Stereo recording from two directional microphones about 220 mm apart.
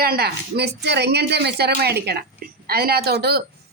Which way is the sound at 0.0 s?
45° right (ahead or behind).